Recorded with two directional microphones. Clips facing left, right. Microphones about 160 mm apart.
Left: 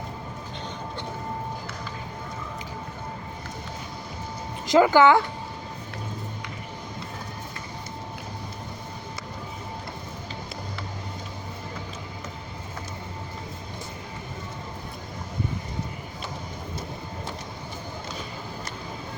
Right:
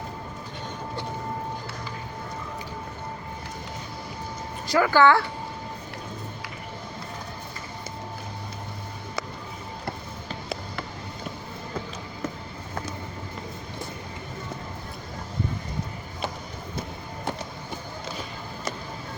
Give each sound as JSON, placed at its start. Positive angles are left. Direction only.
{"t": 4.6, "sound": "speech", "side_deg": 20}